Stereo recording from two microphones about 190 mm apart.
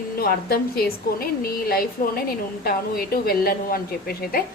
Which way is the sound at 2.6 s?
50° left (ahead or behind).